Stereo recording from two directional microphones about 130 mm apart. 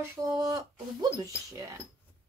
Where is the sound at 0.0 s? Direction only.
20° right (ahead or behind).